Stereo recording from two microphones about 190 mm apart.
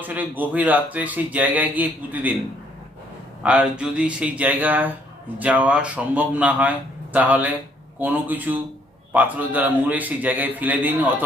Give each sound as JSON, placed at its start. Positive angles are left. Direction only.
{"t": 0.0, "sound": "speech", "side_deg": -10}
{"t": 3.4, "sound": "speech", "side_deg": -5}